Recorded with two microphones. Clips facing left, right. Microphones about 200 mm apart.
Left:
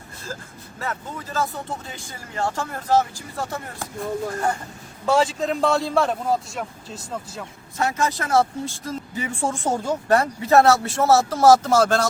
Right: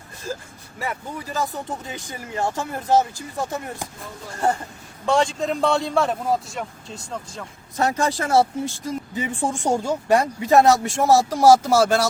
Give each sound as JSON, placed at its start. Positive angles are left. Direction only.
{"t": 0.8, "sound": "speech", "side_deg": -15}
{"t": 5.0, "sound": "a man's voice", "side_deg": 5}
{"t": 7.8, "sound": "speech", "side_deg": -35}
{"t": 8.4, "sound": "a man's voice", "side_deg": 0}
{"t": 8.9, "sound": "speech", "side_deg": -20}